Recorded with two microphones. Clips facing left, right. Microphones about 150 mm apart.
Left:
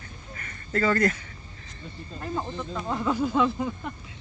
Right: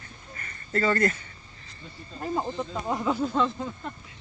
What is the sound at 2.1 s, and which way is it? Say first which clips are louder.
Speech: right 2 dB; 20° right (ahead or behind).